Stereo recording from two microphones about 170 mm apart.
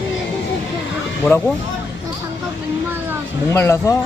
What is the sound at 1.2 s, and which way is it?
Speech, 5° left (ahead or behind).